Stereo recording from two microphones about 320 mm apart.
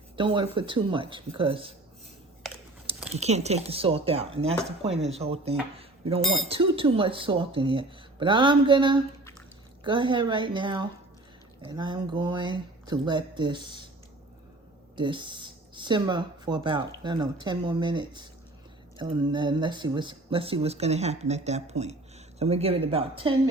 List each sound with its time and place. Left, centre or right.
0.2 s speech: centre
3.1 s speech: centre
14.9 s speech: centre